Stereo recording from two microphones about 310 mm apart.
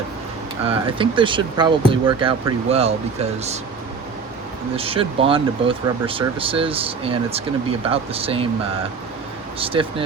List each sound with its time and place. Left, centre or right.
0.7 s speech: centre
4.8 s speech: centre
9.6 s speech: centre